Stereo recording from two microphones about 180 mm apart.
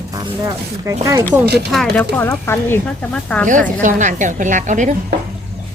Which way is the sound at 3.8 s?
45° right (ahead or behind).